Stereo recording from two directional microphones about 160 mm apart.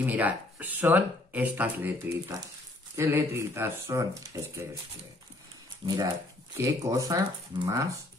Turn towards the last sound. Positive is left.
turn(degrees=-20)  # may be behind; listen again after turning